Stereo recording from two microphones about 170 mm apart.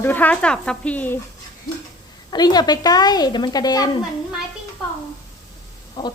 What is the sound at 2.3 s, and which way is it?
A woman's voice, 25° left (ahead or behind).